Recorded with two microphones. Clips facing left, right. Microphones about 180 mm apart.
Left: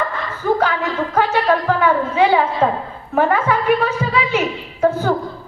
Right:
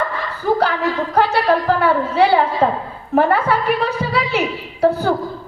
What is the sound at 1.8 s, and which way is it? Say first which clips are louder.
A woman's voice: even; 35° right (ahead or behind).